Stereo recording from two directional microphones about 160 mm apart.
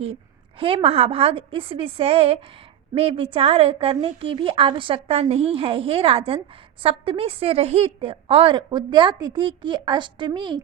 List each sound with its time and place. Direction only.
0.6 s a woman's voice: 35° right (ahead or behind)